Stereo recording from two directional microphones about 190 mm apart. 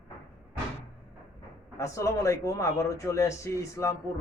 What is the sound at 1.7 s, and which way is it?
Speech, 15° left (ahead or behind).